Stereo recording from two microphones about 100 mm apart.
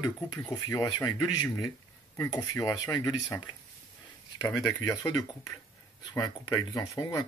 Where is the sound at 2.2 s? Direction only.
30° left (ahead or behind).